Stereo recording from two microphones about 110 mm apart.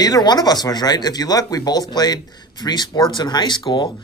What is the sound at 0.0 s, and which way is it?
Speech, 40° left (ahead or behind).